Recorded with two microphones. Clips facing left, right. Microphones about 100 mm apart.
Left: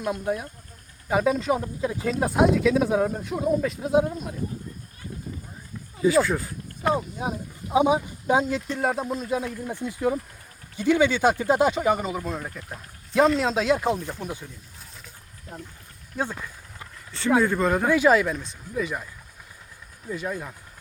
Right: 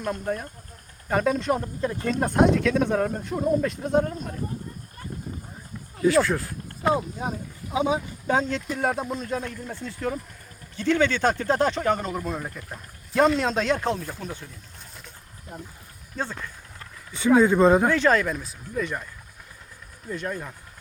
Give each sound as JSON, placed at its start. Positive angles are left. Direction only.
{"t": 0.0, "sound": "speech", "side_deg": 5}
{"t": 6.0, "sound": "speech", "side_deg": 0}
{"t": 7.7, "sound": "speech", "side_deg": 20}
{"t": 16.1, "sound": "a sound", "side_deg": 10}
{"t": 17.1, "sound": "speech", "side_deg": -10}
{"t": 17.8, "sound": "speech", "side_deg": 10}
{"t": 20.1, "sound": "speech", "side_deg": 5}